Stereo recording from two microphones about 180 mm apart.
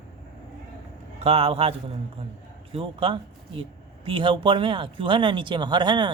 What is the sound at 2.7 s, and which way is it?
Speech, 30° right (ahead or behind).